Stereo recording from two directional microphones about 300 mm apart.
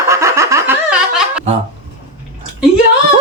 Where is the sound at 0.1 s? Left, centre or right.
Centre.